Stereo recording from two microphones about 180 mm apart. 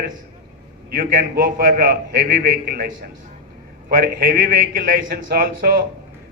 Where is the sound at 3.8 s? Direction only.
55° right (ahead or behind).